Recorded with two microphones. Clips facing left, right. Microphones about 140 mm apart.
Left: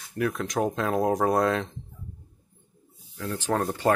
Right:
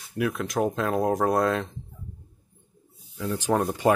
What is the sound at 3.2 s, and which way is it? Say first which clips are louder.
Speech: right 2 dB; 15° right (ahead or behind).